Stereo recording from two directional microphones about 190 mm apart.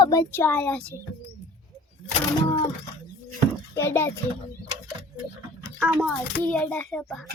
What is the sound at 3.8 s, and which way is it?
Speech, 10° left (ahead or behind).